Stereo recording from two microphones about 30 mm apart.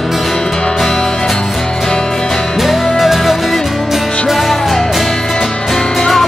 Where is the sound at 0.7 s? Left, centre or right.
Centre.